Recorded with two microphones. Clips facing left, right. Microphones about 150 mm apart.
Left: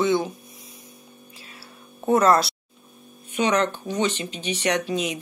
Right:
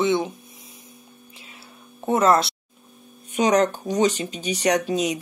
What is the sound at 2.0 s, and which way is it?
Speech, 25° right (ahead or behind).